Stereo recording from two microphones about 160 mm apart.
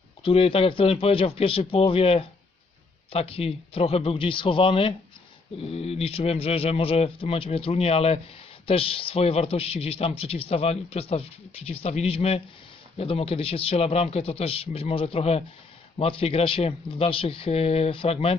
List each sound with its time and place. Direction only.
0.2 s speech: 35° left (ahead or behind)